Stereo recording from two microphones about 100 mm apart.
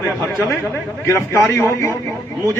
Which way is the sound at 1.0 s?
30° left (ahead or behind).